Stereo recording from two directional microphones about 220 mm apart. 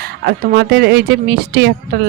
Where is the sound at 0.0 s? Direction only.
45° right (ahead or behind).